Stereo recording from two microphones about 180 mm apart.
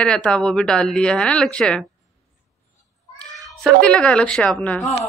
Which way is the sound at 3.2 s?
Centre (ahead or behind).